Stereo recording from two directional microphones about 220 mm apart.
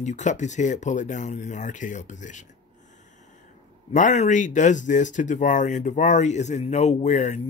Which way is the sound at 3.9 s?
35° left (ahead or behind).